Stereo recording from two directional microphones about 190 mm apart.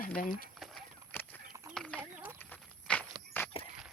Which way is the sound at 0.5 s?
Centre (ahead or behind).